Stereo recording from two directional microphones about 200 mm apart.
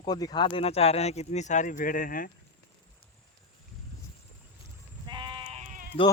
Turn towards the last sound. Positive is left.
turn(degrees=-40)  # may be behind; listen again after turning